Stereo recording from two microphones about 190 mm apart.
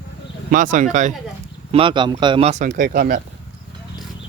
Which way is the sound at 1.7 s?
25° right (ahead or behind).